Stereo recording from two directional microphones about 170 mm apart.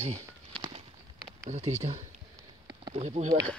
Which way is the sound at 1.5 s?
40° right (ahead or behind).